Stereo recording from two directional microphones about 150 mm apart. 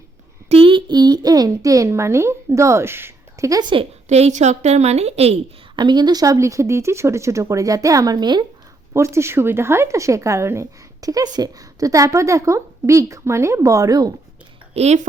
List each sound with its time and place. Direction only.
0.4 s a woman's voice: 40° right (ahead or behind)
4.1 s a woman's voice: 50° right (ahead or behind)
5.7 s a woman's voice: 30° right (ahead or behind)
8.9 s a woman's voice: 20° right (ahead or behind)
14.7 s speech: 45° right (ahead or behind)